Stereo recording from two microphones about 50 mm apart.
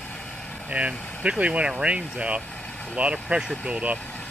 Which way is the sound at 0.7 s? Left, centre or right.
Right.